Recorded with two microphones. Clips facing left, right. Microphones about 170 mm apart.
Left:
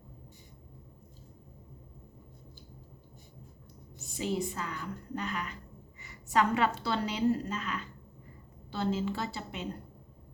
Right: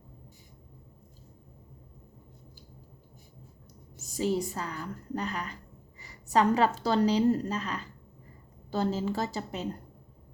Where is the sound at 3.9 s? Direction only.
40° right (ahead or behind).